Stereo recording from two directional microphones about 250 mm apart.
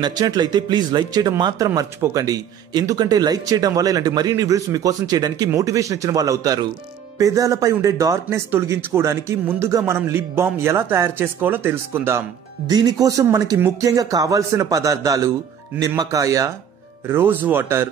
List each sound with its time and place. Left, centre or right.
0.0 s speech: centre